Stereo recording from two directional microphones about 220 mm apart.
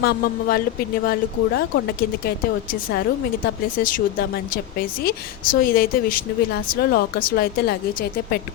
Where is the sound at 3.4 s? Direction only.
40° left (ahead or behind).